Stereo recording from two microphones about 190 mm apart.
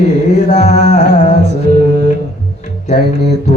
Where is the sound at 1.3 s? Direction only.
60° right (ahead or behind).